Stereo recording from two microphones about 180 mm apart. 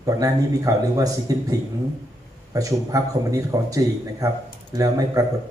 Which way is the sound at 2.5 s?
20° right (ahead or behind).